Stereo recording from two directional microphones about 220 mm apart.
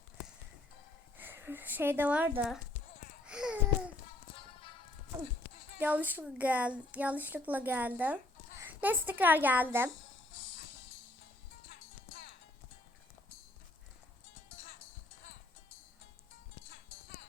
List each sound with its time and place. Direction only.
1.2 s speech: 10° right (ahead or behind)
3.2 s babbling: 5° right (ahead or behind)
5.8 s a woman's voice: 5° right (ahead or behind)
11.7 s music: 45° left (ahead or behind)